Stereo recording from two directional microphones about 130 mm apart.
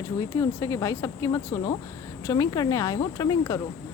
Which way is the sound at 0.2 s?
25° left (ahead or behind).